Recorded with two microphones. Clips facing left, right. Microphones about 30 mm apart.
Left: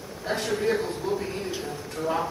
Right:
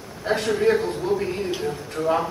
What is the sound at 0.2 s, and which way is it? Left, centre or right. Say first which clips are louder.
A man's voice: right 6 dB; right.